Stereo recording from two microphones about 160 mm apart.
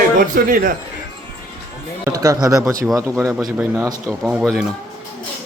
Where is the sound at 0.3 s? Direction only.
60° right (ahead or behind).